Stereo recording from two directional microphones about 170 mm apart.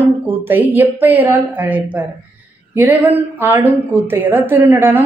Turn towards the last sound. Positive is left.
turn(degrees=-10)  # may be behind; listen again after turning